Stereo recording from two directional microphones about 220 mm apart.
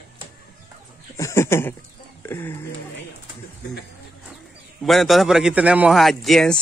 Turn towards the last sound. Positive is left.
turn(degrees=0)  # may be behind; listen again after turning